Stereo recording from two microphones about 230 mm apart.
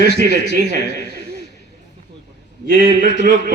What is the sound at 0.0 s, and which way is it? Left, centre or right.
A man's voice, right.